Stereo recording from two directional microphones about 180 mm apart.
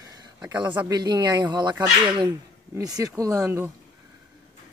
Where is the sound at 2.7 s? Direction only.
20° right (ahead or behind).